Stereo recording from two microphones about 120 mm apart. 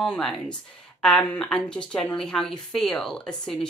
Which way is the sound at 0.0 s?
5° left (ahead or behind).